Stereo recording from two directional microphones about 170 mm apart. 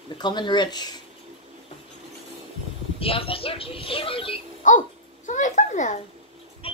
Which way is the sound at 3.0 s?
35° left (ahead or behind).